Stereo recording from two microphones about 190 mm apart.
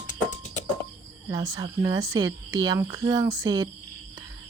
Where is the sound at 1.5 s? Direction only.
20° right (ahead or behind).